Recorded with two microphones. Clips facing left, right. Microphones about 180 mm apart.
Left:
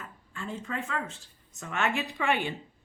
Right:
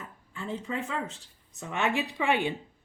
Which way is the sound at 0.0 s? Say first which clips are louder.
Right 1 dB; 20° right (ahead or behind).